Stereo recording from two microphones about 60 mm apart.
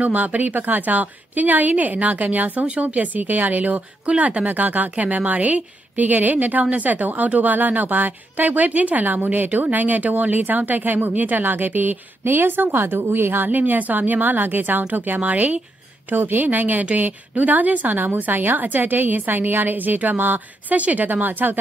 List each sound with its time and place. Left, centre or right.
0.0 s a woman's voice: right